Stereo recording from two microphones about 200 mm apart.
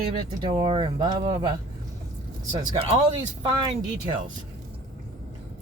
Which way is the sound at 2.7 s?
20° right (ahead or behind).